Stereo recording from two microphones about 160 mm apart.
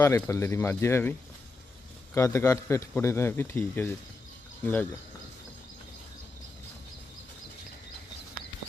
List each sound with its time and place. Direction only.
0.0 s a man's voice: 20° left (ahead or behind)
2.1 s a man's voice: 15° left (ahead or behind)